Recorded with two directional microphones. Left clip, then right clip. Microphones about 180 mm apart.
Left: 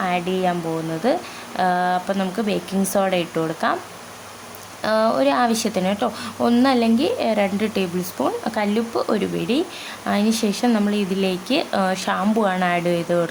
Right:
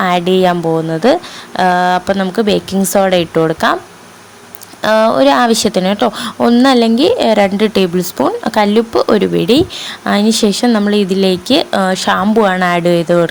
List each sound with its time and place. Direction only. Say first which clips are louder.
0.0 s speech: right 10 dB; 45° right (ahead or behind)
4.8 s speech: right 9 dB; 40° right (ahead or behind)